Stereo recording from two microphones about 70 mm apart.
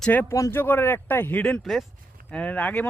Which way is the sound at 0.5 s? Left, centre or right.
Left.